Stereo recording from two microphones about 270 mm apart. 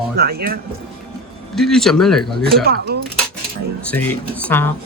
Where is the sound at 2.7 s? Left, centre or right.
Right.